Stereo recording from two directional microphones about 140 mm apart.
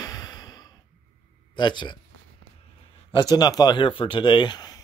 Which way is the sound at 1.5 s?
35° left (ahead or behind).